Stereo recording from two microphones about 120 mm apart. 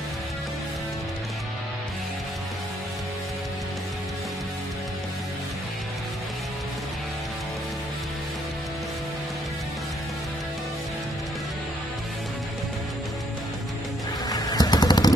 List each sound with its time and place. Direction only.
14.3 s vehicle: 35° left (ahead or behind)